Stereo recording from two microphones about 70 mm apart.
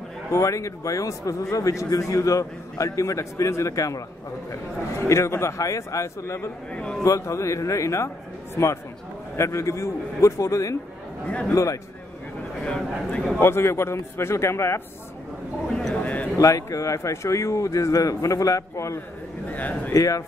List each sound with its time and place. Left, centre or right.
0.3 s a man's voice: left
5.0 s a man's voice: left
6.7 s speech: centre
7.0 s a man's voice: left
11.2 s a man's voice: centre
11.5 s a man's voice: left
12.6 s speech: centre
13.4 s a man's voice: left
15.9 s a sound: centre
16.3 s a man's voice: left
19.5 s a man's voice: left
19.9 s a man's voice: left